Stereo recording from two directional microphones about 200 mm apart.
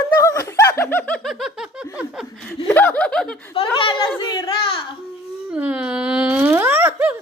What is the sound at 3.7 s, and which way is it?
A child's voice, 25° left (ahead or behind).